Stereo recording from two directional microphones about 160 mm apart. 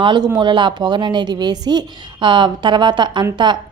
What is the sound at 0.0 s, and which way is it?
A woman's voice, 30° right (ahead or behind).